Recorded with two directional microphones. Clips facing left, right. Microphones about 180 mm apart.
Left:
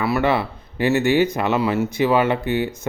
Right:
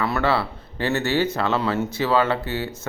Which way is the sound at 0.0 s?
15° left (ahead or behind).